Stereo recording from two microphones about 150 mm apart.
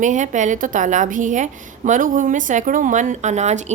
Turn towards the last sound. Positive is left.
turn(degrees=-50)  # may be behind; listen again after turning